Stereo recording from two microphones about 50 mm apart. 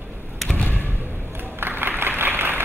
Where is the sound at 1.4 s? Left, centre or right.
Right.